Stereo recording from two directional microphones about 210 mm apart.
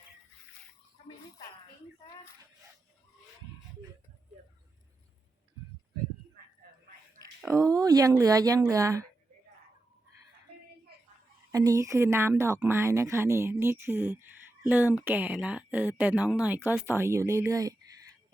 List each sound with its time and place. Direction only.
7.2 s speech: 15° right (ahead or behind)
11.5 s speech: 15° right (ahead or behind)